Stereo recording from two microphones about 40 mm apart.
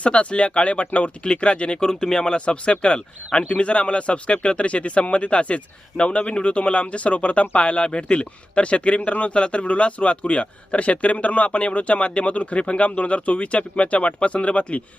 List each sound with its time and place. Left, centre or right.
0.0 s speech: left